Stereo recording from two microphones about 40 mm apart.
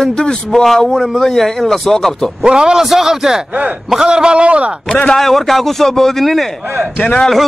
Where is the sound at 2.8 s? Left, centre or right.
Centre.